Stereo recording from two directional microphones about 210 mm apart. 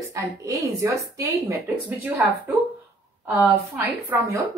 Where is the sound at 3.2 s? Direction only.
5° right (ahead or behind).